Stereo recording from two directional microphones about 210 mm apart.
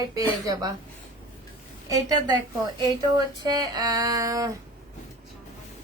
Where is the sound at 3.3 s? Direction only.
20° right (ahead or behind).